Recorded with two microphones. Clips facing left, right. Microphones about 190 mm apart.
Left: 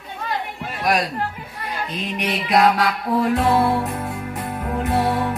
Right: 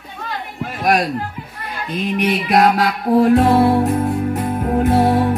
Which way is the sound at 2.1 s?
55° right (ahead or behind).